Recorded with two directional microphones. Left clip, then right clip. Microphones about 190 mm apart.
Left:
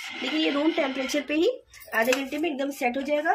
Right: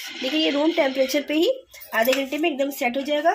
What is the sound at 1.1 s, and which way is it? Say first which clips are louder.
A woman's voice: right 3 dB; 20° right (ahead or behind).